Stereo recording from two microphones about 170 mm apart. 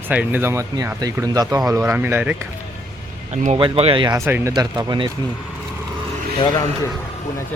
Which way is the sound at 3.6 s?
30° right (ahead or behind).